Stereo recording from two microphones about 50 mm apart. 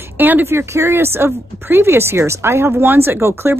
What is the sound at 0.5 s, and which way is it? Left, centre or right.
Speech, right.